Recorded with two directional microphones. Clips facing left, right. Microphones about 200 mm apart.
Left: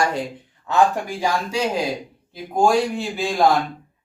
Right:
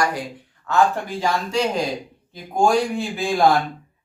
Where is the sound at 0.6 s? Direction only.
10° left (ahead or behind).